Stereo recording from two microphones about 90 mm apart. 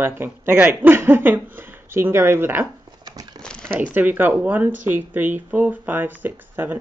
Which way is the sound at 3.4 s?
10° left (ahead or behind).